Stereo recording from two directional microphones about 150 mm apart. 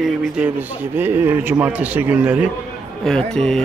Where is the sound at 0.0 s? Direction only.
10° right (ahead or behind).